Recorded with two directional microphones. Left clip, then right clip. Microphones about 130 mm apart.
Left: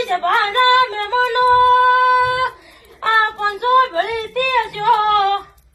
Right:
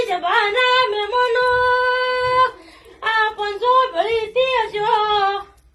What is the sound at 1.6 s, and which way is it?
Singing, 20° right (ahead or behind).